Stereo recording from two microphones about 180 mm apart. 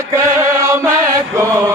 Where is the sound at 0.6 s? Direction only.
15° right (ahead or behind).